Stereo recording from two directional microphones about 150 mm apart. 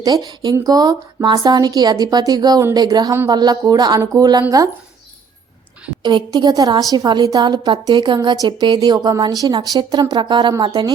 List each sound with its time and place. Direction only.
0.0 s speech: 25° right (ahead or behind)
6.0 s speech: 30° right (ahead or behind)